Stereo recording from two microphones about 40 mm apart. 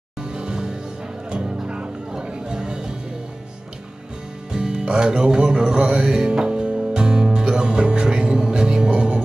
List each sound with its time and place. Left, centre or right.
0.2 s music: centre
4.5 s music: centre